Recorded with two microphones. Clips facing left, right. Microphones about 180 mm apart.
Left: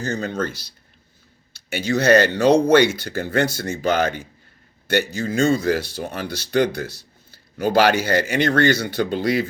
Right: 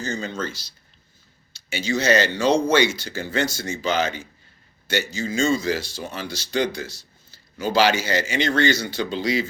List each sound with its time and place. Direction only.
0.0 s speech: 60° left (ahead or behind)